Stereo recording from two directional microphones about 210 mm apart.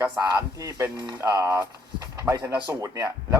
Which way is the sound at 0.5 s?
20° right (ahead or behind).